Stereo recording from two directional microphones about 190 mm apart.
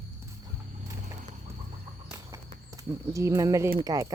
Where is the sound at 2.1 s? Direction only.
15° right (ahead or behind).